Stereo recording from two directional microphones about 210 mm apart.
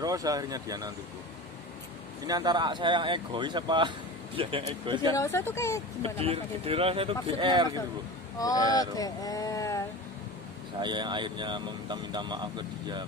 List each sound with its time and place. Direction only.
0.0 s speech: 15° right (ahead or behind)
2.2 s speech: 20° right (ahead or behind)
5.1 s speech: 10° left (ahead or behind)
6.0 s speech: 25° right (ahead or behind)
8.4 s speech: 15° left (ahead or behind)
8.9 s a sound: 15° left (ahead or behind)
10.8 s speech: 20° right (ahead or behind)